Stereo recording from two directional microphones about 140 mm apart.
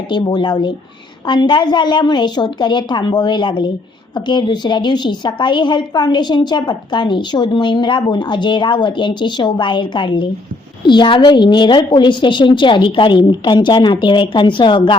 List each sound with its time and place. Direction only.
0.1 s a woman's voice: 30° left (ahead or behind)